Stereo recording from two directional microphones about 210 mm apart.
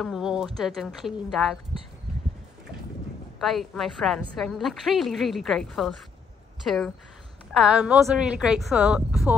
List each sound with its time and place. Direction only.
0.0 s a sound: centre (ahead or behind)
0.6 s a woman's voice: centre (ahead or behind)
3.3 s a woman's voice: centre (ahead or behind)